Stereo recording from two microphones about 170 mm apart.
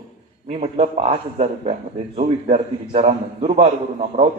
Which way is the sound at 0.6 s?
35° right (ahead or behind).